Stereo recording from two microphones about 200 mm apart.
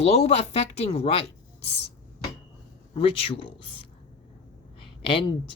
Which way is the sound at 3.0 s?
25° left (ahead or behind).